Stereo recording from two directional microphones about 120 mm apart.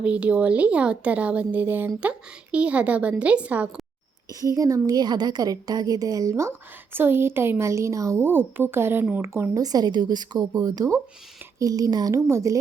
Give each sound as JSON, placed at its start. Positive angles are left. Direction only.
{"t": 0.0, "sound": "a woman's voice", "side_deg": -10}
{"t": 4.4, "sound": "a woman's voice", "side_deg": -30}